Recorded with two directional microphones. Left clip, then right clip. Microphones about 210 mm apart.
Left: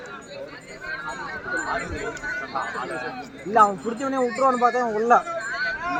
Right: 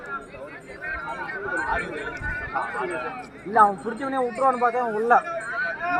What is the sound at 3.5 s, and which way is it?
Speech, 45° left (ahead or behind).